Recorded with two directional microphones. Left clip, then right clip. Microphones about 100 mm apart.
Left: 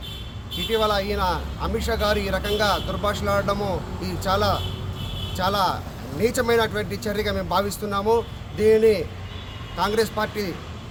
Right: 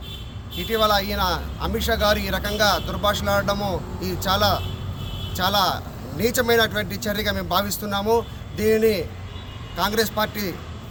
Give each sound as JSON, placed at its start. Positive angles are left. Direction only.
{"t": 0.7, "sound": "speech", "side_deg": 20}